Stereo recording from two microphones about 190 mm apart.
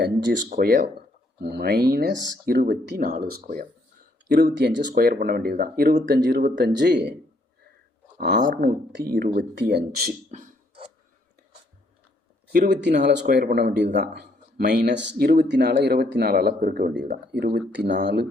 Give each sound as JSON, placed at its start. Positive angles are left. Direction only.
{"t": 0.5, "sound": "speech", "side_deg": -50}
{"t": 1.4, "sound": "speech", "side_deg": -60}
{"t": 6.6, "sound": "speech", "side_deg": -65}
{"t": 8.4, "sound": "speech", "side_deg": -65}
{"t": 10.3, "sound": "a sound", "side_deg": -35}
{"t": 12.5, "sound": "speech", "side_deg": -60}
{"t": 17.0, "sound": "speech", "side_deg": -65}